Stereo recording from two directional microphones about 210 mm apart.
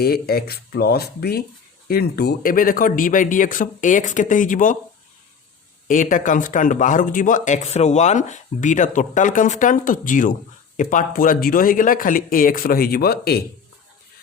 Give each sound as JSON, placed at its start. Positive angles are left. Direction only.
{"t": 0.0, "sound": "speech", "side_deg": 45}
{"t": 5.9, "sound": "speech", "side_deg": 40}